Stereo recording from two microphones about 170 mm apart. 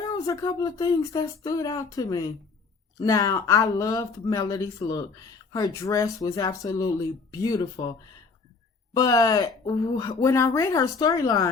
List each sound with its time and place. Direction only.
0.1 s speech: 20° left (ahead or behind)